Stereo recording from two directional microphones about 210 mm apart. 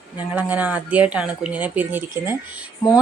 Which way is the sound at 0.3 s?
5° right (ahead or behind).